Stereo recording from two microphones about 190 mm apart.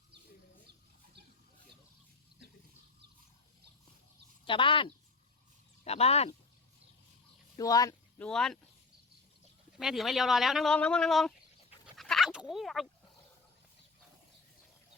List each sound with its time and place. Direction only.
4.4 s speech: 25° left (ahead or behind)
7.5 s speech: 20° left (ahead or behind)
8.2 s speech: 5° left (ahead or behind)
9.7 s speech: centre (ahead or behind)
11.9 s a sound: centre (ahead or behind)